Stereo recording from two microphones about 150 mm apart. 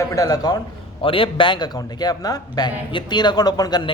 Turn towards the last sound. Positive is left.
turn(degrees=30)  # may be behind; listen again after turning